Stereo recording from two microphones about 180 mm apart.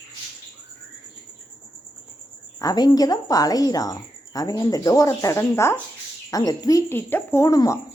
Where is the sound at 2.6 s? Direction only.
20° left (ahead or behind).